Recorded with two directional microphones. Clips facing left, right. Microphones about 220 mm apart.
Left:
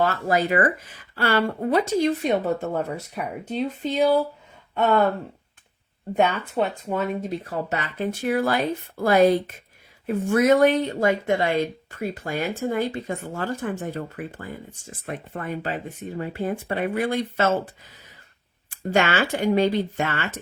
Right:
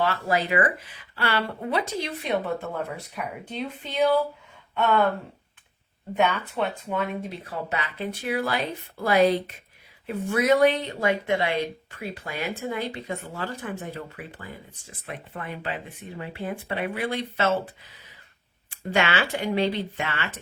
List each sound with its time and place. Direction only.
0.0 s speech: 45° left (ahead or behind)
6.1 s speech: 40° left (ahead or behind)
18.7 s speech: 45° left (ahead or behind)